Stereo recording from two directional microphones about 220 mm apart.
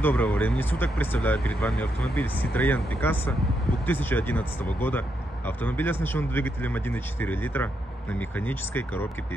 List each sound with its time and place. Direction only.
0.0 s speech: 5° left (ahead or behind)